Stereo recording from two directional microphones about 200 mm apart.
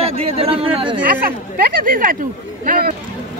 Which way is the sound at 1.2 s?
50° right (ahead or behind).